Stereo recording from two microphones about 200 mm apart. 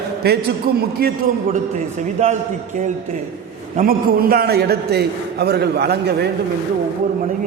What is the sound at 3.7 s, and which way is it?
A man's voice, 45° right (ahead or behind).